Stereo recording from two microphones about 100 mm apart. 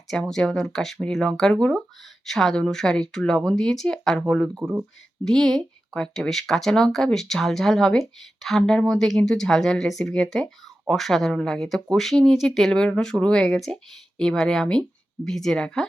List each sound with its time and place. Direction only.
0.1 s speech: 5° left (ahead or behind)
4.6 s speech: 15° right (ahead or behind)
5.2 s speech: 5° left (ahead or behind)